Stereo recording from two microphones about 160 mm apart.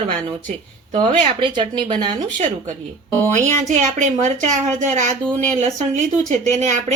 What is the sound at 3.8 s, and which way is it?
A woman's voice, 50° right (ahead or behind).